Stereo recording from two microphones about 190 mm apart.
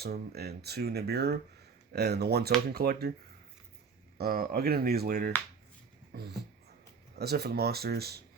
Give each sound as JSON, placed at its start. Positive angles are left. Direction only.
{"t": 0.0, "sound": "speech", "side_deg": -55}
{"t": 4.2, "sound": "speech", "side_deg": -55}